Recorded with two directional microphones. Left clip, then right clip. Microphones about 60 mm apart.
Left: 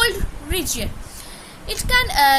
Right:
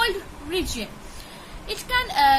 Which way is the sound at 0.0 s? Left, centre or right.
Left.